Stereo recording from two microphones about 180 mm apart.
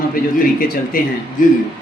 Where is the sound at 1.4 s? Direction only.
50° left (ahead or behind).